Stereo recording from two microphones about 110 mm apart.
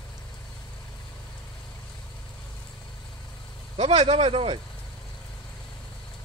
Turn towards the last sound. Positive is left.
turn(degrees=-55)  # may be behind; listen again after turning